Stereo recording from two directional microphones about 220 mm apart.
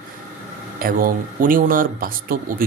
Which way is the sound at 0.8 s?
40° right (ahead or behind).